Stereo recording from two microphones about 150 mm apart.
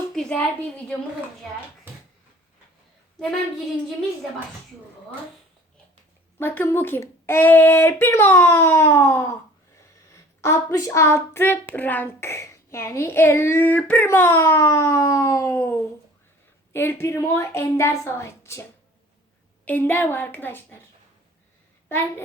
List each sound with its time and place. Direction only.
0.1 s a sound: 5° left (ahead or behind)
6.4 s a child's voice: 15° left (ahead or behind)
16.7 s a child's voice: 15° left (ahead or behind)
19.6 s a child's voice: 15° left (ahead or behind)